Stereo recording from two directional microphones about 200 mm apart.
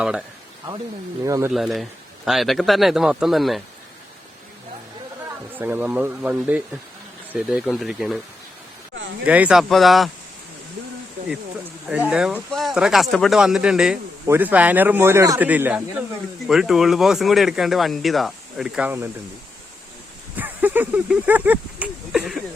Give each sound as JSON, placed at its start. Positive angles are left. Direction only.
{"t": 0.0, "sound": "speech", "side_deg": -5}
{"t": 1.2, "sound": "speech", "side_deg": -15}
{"t": 1.5, "sound": "speech", "side_deg": 0}
{"t": 5.5, "sound": "speech", "side_deg": -10}
{"t": 9.2, "sound": "speech", "side_deg": -5}
{"t": 11.9, "sound": "speech", "side_deg": -5}
{"t": 20.3, "sound": "speech", "side_deg": -10}